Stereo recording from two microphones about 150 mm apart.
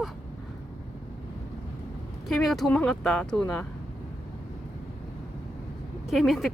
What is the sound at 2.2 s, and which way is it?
Speech, centre (ahead or behind).